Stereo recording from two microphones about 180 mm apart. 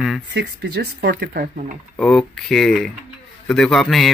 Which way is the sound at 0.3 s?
75° right (ahead or behind).